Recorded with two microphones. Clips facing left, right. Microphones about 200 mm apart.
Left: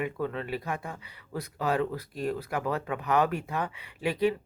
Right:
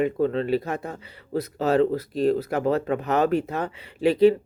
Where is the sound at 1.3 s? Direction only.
25° right (ahead or behind).